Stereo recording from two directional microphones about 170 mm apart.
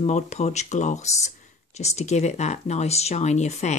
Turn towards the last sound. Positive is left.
turn(degrees=40)  # may be behind; listen again after turning